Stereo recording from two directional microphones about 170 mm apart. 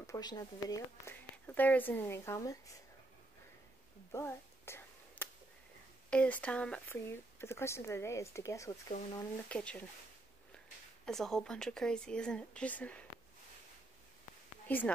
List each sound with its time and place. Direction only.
0.0 s speech: 20° left (ahead or behind)
1.3 s speech: 10° left (ahead or behind)
4.1 s whispering: 15° left (ahead or behind)
6.0 s speech: 5° left (ahead or behind)
9.5 s speech: 5° left (ahead or behind)
11.1 s speech: centre (ahead or behind)
14.7 s speech: 10° left (ahead or behind)